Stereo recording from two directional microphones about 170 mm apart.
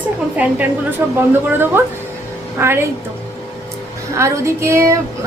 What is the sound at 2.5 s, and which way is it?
Speech, 15° right (ahead or behind).